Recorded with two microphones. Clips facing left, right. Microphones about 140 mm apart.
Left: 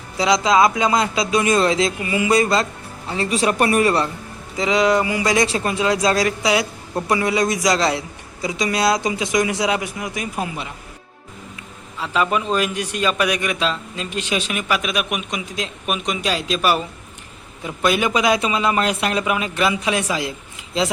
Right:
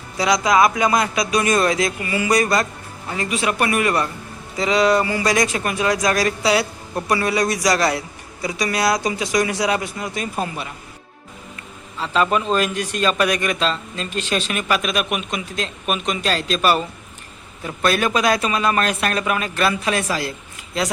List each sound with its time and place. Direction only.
0.2 s a man's voice: 25° left (ahead or behind)
11.9 s a man's voice: 10° left (ahead or behind)